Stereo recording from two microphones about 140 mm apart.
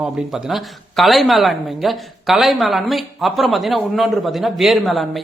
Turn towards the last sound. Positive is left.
turn(degrees=0)  # may be behind; listen again after turning